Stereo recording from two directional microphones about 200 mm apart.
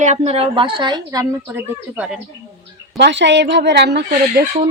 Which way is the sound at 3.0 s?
60° right (ahead or behind).